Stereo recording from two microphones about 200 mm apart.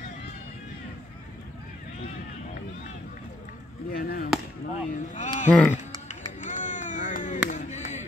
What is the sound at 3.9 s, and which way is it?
Chop, 50° left (ahead or behind).